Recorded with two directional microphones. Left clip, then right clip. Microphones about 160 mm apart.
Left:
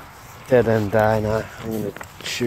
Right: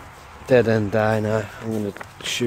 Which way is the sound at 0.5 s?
15° right (ahead or behind).